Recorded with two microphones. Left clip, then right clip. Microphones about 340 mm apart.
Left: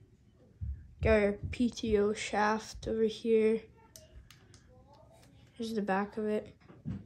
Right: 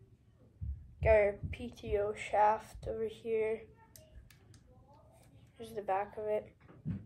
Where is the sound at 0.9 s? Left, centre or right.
Left.